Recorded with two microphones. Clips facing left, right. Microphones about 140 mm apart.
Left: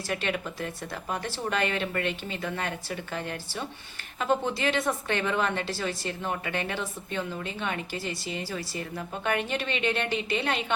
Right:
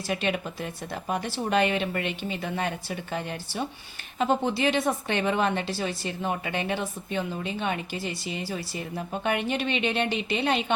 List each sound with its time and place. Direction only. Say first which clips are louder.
0.1 s a woman's voice: right 3 dB; 20° right (ahead or behind)